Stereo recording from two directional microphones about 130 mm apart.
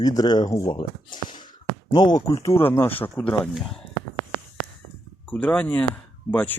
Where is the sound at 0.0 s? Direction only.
30° left (ahead or behind); by 3.5 s 10° left (ahead or behind).